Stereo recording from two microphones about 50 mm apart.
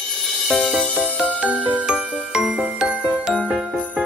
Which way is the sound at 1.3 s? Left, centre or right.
Right.